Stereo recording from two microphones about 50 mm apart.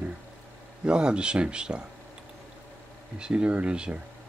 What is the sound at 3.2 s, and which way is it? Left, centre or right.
Speech, right.